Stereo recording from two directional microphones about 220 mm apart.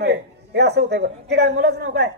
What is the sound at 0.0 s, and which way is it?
A woman's voice, 50° right (ahead or behind).